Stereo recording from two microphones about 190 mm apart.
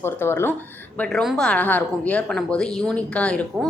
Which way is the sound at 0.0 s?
15° left (ahead or behind).